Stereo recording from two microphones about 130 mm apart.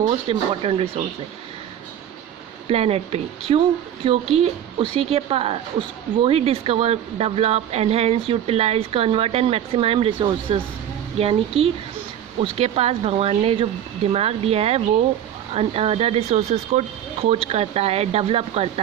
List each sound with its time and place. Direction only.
0.1 s speech: 45° right (ahead or behind)
2.6 s speech: 50° right (ahead or behind)